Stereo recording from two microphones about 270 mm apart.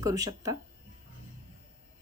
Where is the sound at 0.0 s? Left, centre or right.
Centre.